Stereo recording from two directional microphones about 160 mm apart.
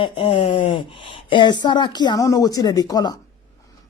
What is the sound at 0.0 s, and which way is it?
Speech, 35° left (ahead or behind).